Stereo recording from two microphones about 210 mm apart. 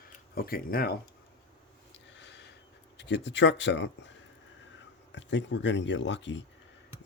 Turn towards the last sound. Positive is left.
turn(degrees=60)  # may be behind; listen again after turning